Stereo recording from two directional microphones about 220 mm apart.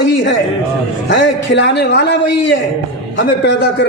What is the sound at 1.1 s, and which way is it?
A man's voice, 55° left (ahead or behind).